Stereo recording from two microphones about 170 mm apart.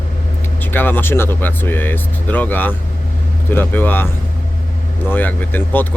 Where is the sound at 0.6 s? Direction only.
10° left (ahead or behind).